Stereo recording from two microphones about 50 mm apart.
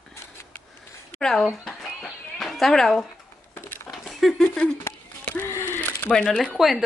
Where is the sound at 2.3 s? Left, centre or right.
Centre.